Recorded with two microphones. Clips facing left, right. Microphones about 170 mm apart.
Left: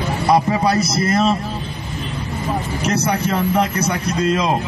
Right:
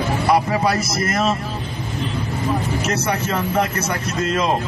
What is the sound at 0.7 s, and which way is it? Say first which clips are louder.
Speech: left 4 dB; 30° left (ahead or behind).